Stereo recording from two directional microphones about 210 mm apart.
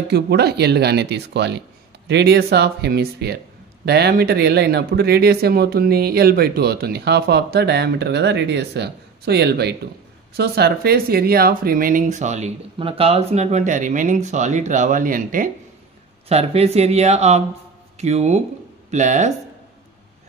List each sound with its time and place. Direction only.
0.1 s speech: 50° right (ahead or behind)
16.3 s speech: 30° right (ahead or behind)